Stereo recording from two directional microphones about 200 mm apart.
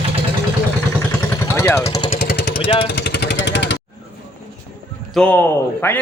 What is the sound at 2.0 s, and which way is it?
Vehicle, 50° left (ahead or behind).